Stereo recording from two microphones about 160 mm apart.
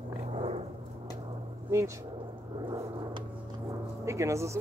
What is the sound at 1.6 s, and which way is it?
Speech, 20° right (ahead or behind).